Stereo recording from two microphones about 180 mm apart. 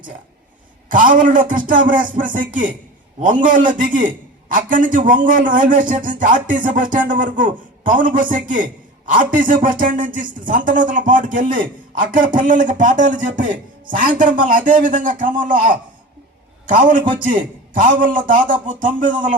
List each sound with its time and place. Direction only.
0.9 s a man's voice: 45° right (ahead or behind)
17.7 s a man's voice: 45° right (ahead or behind)